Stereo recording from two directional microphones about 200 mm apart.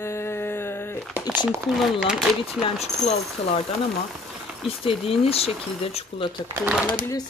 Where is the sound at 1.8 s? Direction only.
Centre (ahead or behind).